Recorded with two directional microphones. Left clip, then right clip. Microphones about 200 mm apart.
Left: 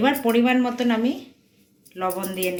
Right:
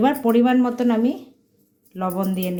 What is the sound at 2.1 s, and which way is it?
Speech, 65° right (ahead or behind).